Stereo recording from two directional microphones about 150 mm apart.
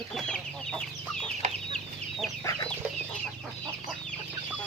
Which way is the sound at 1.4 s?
50° right (ahead or behind).